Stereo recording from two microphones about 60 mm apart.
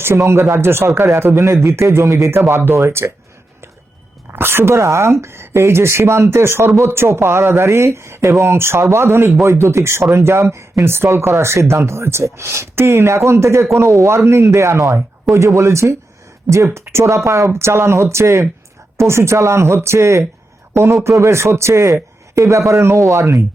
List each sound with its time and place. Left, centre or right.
0.1 s speech: right
1.7 s speech: right
2.0 s speech: right
2.5 s speech: right
4.3 s speech: right
4.7 s speech: right